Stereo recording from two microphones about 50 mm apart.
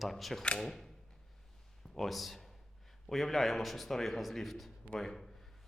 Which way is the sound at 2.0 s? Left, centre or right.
Centre.